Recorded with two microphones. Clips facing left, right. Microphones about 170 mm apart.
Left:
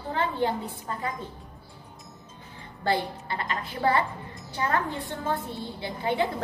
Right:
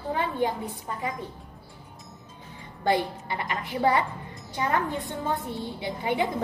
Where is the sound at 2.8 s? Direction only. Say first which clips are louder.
Right 2 dB; 15° right (ahead or behind).